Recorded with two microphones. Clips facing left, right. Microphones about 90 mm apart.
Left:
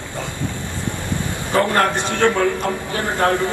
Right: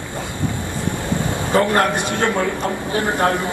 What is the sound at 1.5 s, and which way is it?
A man's voice, 20° right (ahead or behind).